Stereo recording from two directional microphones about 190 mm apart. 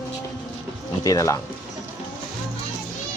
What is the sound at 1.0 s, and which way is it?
Speech, 20° left (ahead or behind).